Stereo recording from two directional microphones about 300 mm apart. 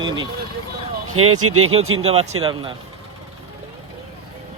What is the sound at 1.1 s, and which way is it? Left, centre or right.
Speech, right.